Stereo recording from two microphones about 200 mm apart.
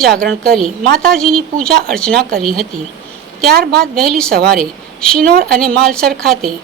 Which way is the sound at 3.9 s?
Centre (ahead or behind).